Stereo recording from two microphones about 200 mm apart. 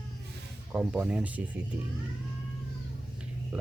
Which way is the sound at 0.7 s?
5° right (ahead or behind).